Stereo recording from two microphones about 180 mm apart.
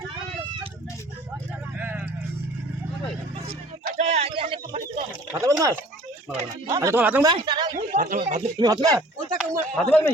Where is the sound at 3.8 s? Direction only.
40° right (ahead or behind).